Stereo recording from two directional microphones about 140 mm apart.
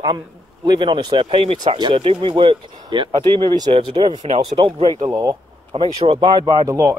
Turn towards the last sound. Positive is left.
turn(degrees=-25)  # may be behind; listen again after turning